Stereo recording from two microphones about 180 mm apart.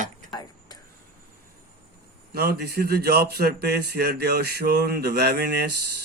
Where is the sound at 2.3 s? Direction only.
60° right (ahead or behind).